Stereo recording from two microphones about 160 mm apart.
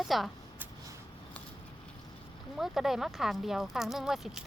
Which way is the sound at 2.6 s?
Centre (ahead or behind).